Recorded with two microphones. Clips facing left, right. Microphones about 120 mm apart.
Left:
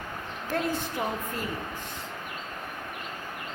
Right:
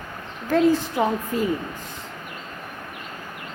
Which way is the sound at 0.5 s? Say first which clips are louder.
Right 11 dB; 90° right.